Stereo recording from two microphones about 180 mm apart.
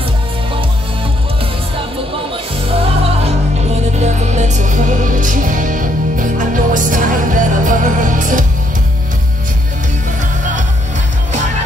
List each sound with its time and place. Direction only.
3.9 s music: 40° right (ahead or behind)